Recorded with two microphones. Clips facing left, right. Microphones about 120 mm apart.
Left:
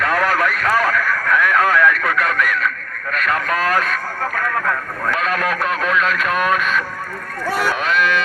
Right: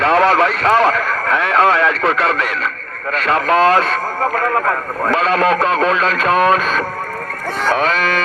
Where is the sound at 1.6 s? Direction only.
85° right.